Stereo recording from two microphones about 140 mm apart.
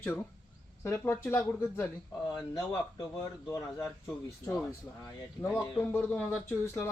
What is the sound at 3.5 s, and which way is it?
Speech, 20° left (ahead or behind).